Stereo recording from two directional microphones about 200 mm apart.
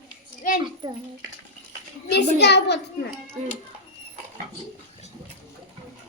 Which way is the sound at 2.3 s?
55° left (ahead or behind).